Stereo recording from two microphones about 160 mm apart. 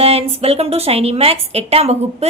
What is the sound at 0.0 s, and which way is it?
A woman's voice, 40° right (ahead or behind).